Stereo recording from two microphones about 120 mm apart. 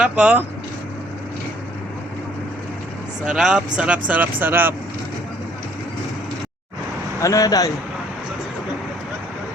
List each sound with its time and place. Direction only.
0.0 s speech: 5° right (ahead or behind)
3.2 s speech: 5° right (ahead or behind)
7.2 s speech: 25° left (ahead or behind)